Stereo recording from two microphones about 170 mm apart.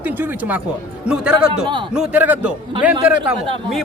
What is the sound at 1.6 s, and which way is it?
Speech, 30° right (ahead or behind).